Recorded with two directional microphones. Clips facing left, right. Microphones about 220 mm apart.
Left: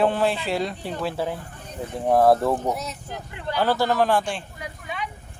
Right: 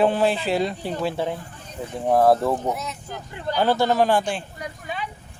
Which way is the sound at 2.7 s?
40° left (ahead or behind).